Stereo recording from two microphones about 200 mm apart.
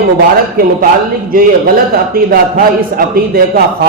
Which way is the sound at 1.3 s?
45° right (ahead or behind).